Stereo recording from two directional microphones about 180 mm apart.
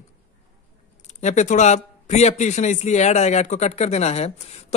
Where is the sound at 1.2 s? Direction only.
40° left (ahead or behind).